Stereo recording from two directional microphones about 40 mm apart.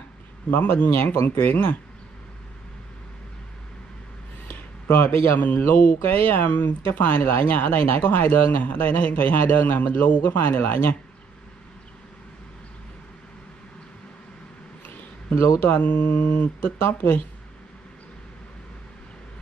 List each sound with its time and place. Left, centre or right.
0.5 s speech: left
1.1 s speech: left
1.5 s speech: left
4.5 s a sound: left
5.0 s a man's voice: left
7.9 s speech: left
15.7 s speech: left
16.3 s speech: left